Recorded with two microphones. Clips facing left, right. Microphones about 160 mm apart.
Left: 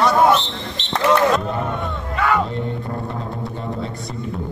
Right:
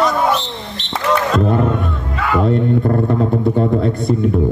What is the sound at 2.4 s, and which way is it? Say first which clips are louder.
Speech: right 11 dB; 60° right (ahead or behind).